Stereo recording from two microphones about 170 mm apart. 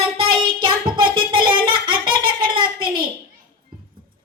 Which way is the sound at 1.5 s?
30° right (ahead or behind).